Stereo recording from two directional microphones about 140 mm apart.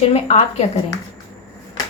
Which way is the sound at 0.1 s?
50° left (ahead or behind).